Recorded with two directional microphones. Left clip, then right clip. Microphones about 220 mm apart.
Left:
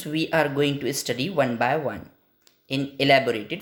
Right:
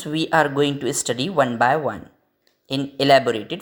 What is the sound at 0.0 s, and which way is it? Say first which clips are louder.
Speech: right 4 dB; 15° right (ahead or behind).